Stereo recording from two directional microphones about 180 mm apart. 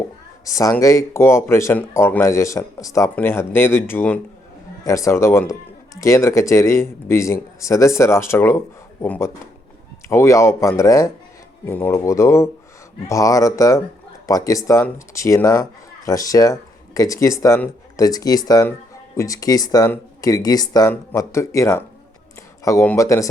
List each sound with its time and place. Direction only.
0.4 s a man's voice: 20° left (ahead or behind)